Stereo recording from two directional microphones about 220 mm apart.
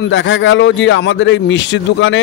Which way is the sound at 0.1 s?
55° left (ahead or behind).